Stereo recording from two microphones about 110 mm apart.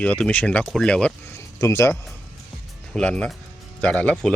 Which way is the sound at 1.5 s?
25° left (ahead or behind).